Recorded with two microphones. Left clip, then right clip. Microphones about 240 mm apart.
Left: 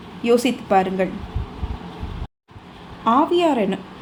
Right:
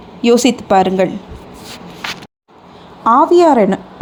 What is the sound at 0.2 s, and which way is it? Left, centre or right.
Speech, right.